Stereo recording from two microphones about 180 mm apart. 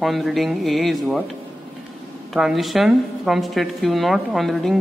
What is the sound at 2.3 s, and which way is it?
Speech, centre (ahead or behind).